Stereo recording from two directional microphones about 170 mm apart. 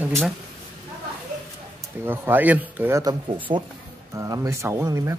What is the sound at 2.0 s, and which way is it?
Speech, 10° right (ahead or behind).